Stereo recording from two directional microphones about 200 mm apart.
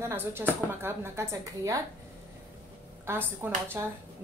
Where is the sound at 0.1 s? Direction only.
10° right (ahead or behind).